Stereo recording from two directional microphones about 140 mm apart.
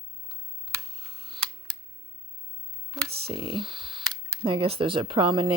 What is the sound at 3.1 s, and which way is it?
Speech, 45° right (ahead or behind).